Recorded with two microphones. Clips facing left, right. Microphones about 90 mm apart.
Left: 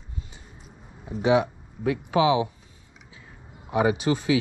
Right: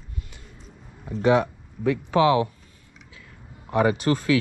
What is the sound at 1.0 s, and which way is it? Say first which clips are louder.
Speech: right 1 dB; 50° right (ahead or behind).